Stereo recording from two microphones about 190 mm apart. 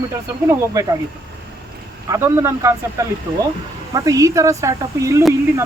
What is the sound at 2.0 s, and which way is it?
Speech, 15° right (ahead or behind).